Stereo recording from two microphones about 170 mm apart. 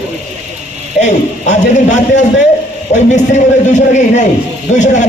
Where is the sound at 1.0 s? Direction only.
45° left (ahead or behind).